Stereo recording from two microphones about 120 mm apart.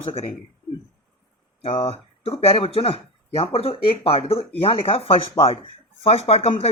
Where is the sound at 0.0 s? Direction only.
55° left (ahead or behind).